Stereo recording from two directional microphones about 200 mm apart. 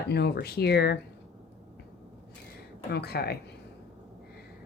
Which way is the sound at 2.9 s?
55° left (ahead or behind).